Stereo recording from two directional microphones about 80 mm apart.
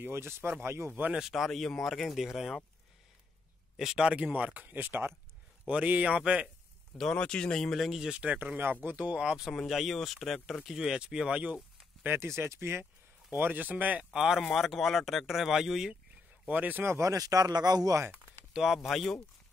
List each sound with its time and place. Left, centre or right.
0.0 s speech: right
1.1 s speech: centre
3.7 s speech: centre; by 5.1 s right
5.7 s speech: centre
7.0 s speech: centre; by 12.8 s right
13.4 s speech: right
14.1 s speech: centre
16.4 s speech: right
17.1 s a man's voice: right
18.5 s speech: centre